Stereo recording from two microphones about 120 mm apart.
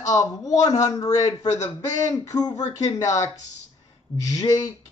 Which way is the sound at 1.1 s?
70° left (ahead or behind).